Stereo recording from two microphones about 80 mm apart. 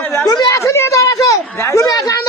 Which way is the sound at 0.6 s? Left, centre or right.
Left.